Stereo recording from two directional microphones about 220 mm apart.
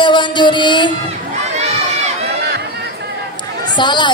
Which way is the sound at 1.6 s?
30° right (ahead or behind).